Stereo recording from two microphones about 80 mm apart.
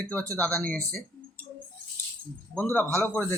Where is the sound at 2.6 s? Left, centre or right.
Left.